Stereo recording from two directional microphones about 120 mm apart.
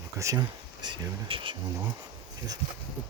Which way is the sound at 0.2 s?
30° right (ahead or behind).